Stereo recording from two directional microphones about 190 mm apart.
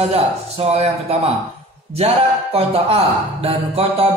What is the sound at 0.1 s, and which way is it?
Speech, 30° right (ahead or behind).